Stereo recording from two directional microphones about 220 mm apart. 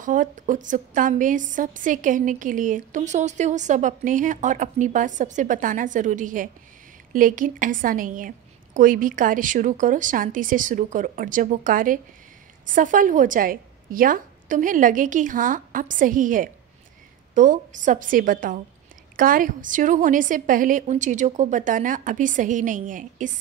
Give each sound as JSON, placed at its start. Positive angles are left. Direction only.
{"t": 0.0, "sound": "a woman's voice", "side_deg": -35}